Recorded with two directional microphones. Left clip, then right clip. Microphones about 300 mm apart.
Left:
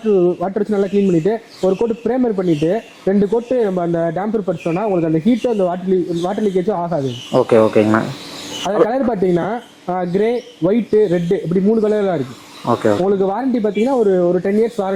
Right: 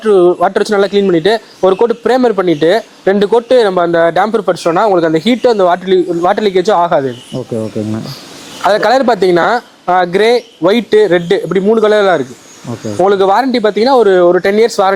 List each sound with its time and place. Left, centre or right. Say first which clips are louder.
0.1 s speech: right 7 dB; centre
7.3 s speech: left 12 dB; centre
8.6 s speech: right 7 dB; right
11.3 s speech: right 6 dB; centre